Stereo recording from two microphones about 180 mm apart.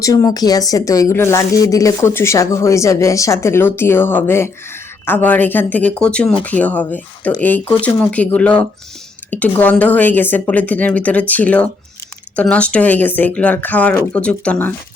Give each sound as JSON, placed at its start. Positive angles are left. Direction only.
{"t": 0.0, "sound": "speech", "side_deg": 20}